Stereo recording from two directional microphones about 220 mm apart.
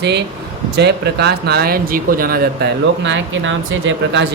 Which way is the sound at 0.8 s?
50° right (ahead or behind).